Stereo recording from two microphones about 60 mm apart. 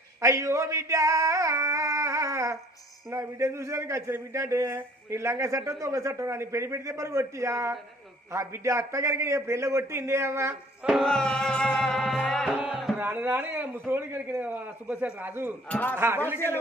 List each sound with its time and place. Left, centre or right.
0.2 s a man's voice: right
11.0 s music: centre
12.7 s music: centre
13.0 s a sound: right
13.2 s a man's voice: right